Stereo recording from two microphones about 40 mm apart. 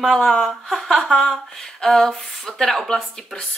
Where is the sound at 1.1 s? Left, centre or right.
Centre.